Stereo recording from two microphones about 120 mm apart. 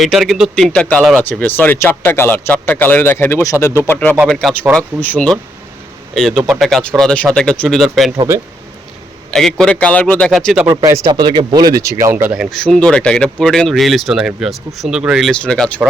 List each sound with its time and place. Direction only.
0.0 s speech: centre (ahead or behind); by 4.2 s 15° left (ahead or behind)
4.3 s speech: 5° left (ahead or behind)
6.1 s speech: centre (ahead or behind)
9.3 s speech: 5° left (ahead or behind)
10.7 s speech: 25° right (ahead or behind)
11.1 s speech: 40° right (ahead or behind); by 12.3 s 20° right (ahead or behind)
12.3 s speech: centre (ahead or behind)
15.3 s speech: 5° left (ahead or behind)